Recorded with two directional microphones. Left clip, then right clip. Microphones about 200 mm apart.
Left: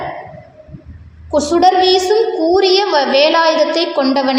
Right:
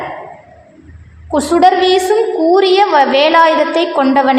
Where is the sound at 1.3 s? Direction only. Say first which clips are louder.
Right 1 dB; 30° right (ahead or behind).